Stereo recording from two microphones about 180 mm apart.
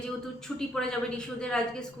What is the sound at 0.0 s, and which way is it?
A woman's voice, 5° left (ahead or behind).